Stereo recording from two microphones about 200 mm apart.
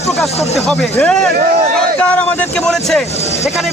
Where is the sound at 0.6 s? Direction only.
5° left (ahead or behind).